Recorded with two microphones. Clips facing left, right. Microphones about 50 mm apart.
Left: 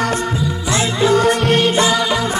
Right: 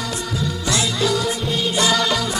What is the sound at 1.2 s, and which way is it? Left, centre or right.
Music, left.